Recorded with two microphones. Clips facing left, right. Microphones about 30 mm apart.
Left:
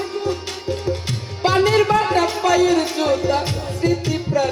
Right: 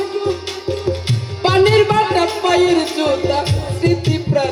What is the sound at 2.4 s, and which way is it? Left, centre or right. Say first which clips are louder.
Speech: right 3 dB; right.